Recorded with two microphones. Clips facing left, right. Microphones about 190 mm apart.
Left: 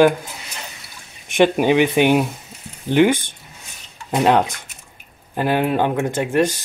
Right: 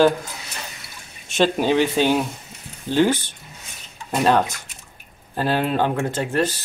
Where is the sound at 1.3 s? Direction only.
15° left (ahead or behind).